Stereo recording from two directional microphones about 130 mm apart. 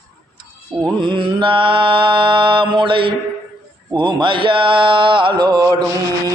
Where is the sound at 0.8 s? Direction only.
40° right (ahead or behind).